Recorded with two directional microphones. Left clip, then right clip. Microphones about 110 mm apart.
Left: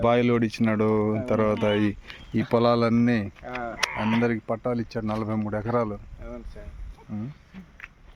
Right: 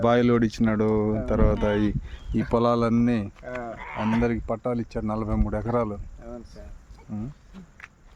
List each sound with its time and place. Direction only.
0.0 s speech: 50° right (ahead or behind)
0.6 s speech: 20° right (ahead or behind); by 3.3 s 5° right (ahead or behind)
3.8 s a sound: 50° left (ahead or behind)
4.2 s speech: centre (ahead or behind)
7.1 s speech: 5° right (ahead or behind)